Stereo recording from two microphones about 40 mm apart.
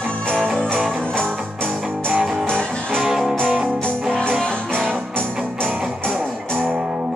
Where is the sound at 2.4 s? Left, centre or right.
Left.